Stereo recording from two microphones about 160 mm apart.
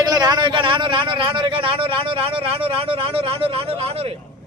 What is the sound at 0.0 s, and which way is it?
A man's voice, 25° right (ahead or behind).